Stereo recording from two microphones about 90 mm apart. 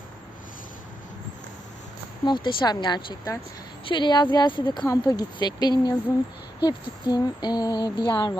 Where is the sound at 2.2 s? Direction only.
65° left (ahead or behind).